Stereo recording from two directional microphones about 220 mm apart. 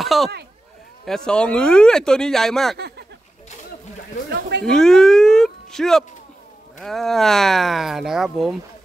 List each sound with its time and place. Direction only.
0.0 s speech: centre (ahead or behind)
4.3 s speech: 50° right (ahead or behind)
4.6 s speech: centre (ahead or behind)